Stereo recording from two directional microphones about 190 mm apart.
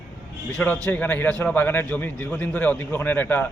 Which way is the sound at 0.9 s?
10° left (ahead or behind).